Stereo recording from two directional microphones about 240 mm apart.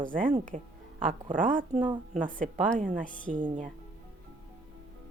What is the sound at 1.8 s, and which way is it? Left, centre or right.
Speech, centre.